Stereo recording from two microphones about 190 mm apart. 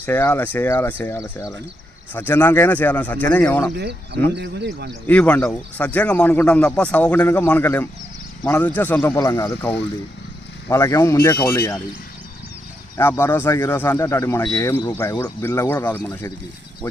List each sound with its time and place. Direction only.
0.0 s a man's voice: 10° left (ahead or behind)
3.8 s speech: 60° right (ahead or behind)
5.0 s a man's voice: 5° left (ahead or behind)
13.0 s a man's voice: 10° left (ahead or behind)